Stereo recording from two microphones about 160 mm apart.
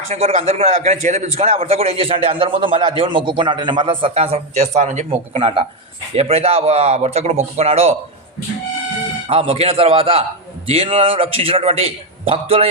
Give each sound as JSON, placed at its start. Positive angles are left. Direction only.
{"t": 0.1, "sound": "a man's voice", "side_deg": -40}
{"t": 5.3, "sound": "a man's voice", "side_deg": -35}
{"t": 9.3, "sound": "a man's voice", "side_deg": -40}